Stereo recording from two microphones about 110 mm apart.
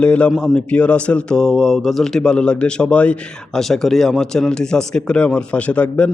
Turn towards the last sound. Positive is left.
turn(degrees=15)  # may be behind; listen again after turning